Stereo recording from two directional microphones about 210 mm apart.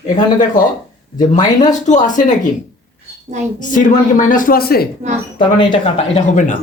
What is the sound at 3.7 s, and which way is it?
Speech, 40° left (ahead or behind).